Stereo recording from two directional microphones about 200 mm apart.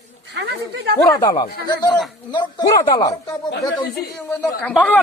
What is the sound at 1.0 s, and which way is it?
Speech, 20° left (ahead or behind).